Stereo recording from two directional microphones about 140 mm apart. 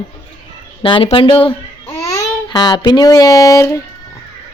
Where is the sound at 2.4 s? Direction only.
30° left (ahead or behind).